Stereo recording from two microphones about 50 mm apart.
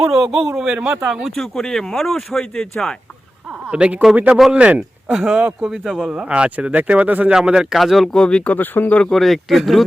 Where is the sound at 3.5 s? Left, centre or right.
Right.